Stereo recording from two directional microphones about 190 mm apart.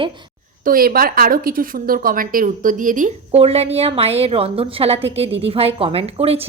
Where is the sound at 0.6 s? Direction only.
50° right (ahead or behind).